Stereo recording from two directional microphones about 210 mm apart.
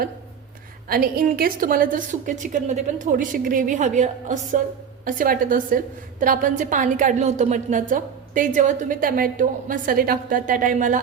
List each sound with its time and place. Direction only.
0.9 s a woman's voice: 45° right (ahead or behind)